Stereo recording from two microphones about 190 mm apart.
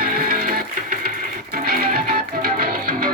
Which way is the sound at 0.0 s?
45° right (ahead or behind).